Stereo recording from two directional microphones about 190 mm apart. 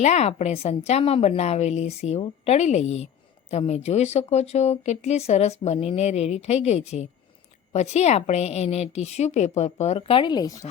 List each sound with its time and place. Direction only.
0.0 s speech: 35° left (ahead or behind); by 10.7 s 20° left (ahead or behind)